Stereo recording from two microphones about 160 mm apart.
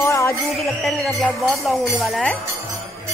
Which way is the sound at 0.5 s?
Centre (ahead or behind).